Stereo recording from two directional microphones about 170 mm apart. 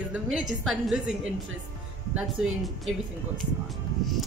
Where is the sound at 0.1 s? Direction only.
5° right (ahead or behind).